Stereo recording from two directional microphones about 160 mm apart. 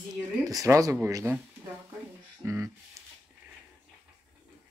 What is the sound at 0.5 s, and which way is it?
Speech, 20° right (ahead or behind).